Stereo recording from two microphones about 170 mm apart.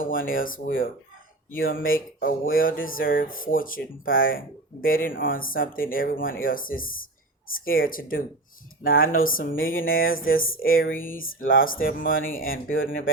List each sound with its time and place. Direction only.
0.0 s speech: 55° left (ahead or behind)